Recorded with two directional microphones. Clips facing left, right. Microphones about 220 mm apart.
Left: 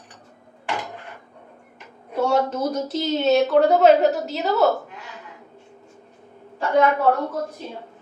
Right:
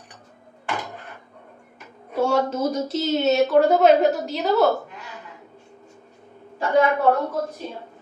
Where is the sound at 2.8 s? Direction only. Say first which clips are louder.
Left 1 dB; 10° right (ahead or behind).